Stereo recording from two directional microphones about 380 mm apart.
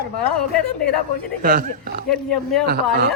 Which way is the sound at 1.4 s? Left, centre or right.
Right.